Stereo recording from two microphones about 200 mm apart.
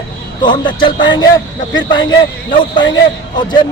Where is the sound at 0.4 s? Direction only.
25° left (ahead or behind).